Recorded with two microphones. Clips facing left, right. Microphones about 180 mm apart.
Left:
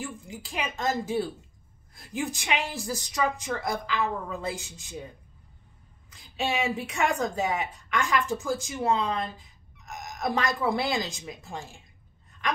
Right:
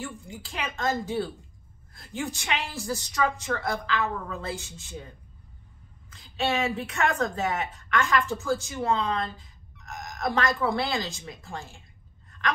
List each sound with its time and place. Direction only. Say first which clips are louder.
0.0 s a woman's voice: even; 20° left (ahead or behind)
6.3 s a woman's voice: right 1 dB; 10° left (ahead or behind)